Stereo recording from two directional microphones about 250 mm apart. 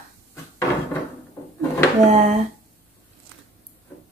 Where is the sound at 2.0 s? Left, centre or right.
Right.